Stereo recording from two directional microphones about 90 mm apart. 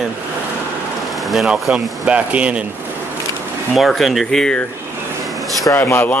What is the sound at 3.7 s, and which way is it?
Speech, centre (ahead or behind).